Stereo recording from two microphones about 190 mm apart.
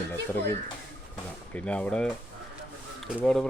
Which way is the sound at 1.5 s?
5° left (ahead or behind).